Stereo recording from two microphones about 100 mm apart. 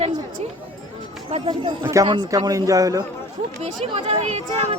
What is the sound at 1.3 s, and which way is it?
Speech, 90° right.